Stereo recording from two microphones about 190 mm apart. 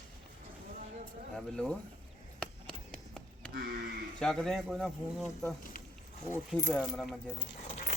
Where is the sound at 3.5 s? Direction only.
55° right (ahead or behind).